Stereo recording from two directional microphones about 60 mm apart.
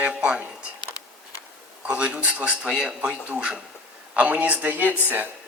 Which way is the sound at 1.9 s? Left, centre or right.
Centre.